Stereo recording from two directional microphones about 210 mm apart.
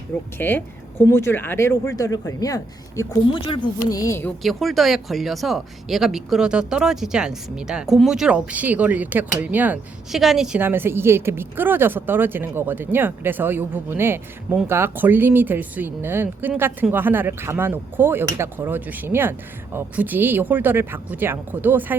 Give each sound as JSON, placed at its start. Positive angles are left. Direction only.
{"t": 0.3, "sound": "speech", "side_deg": 10}
{"t": 4.4, "sound": "speech", "side_deg": 0}